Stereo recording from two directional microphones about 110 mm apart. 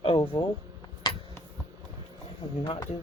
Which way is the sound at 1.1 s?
40° left (ahead or behind).